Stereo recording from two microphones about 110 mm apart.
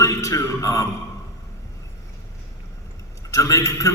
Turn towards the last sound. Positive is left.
turn(degrees=25)  # may be behind; listen again after turning